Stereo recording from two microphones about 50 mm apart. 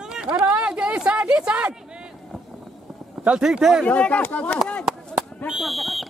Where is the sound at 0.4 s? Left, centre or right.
Centre.